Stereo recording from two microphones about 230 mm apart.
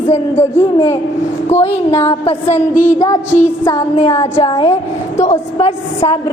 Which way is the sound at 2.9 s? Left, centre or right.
Centre.